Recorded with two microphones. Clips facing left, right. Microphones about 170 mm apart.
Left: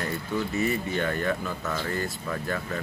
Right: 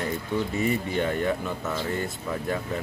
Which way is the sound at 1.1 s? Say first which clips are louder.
Right 2 dB; 25° right (ahead or behind).